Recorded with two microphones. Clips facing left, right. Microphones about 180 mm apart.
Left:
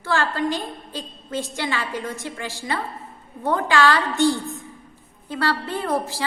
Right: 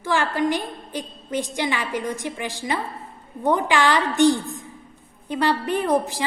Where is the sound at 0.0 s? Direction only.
15° right (ahead or behind).